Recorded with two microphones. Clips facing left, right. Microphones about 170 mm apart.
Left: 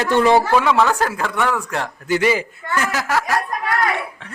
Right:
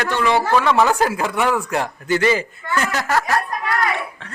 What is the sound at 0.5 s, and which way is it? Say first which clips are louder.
Speech: left 1 dB; 5° left (ahead or behind).